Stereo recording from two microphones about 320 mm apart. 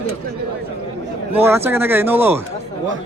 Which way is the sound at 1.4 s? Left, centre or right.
Centre.